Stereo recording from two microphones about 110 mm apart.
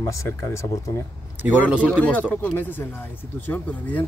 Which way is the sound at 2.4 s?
15° left (ahead or behind).